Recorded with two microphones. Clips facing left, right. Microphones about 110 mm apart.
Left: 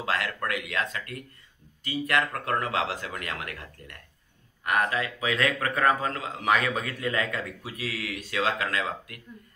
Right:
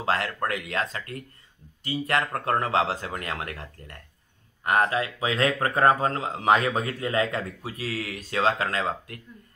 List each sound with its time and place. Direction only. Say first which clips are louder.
0.0 s speech: right 3 dB; 30° right (ahead or behind)